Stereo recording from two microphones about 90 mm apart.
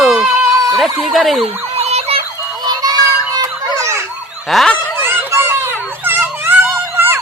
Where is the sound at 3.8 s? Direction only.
35° right (ahead or behind).